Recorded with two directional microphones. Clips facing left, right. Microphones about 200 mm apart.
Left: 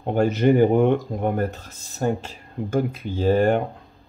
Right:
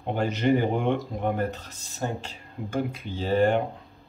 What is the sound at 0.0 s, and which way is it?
Speech, 45° left (ahead or behind).